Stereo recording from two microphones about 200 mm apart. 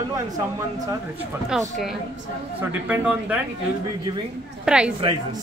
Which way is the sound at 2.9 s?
5° right (ahead or behind).